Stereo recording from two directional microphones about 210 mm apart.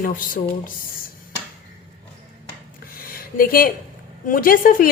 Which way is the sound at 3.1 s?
45° left (ahead or behind).